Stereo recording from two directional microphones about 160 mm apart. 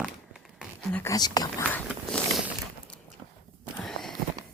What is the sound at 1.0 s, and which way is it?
Speech, 25° left (ahead or behind).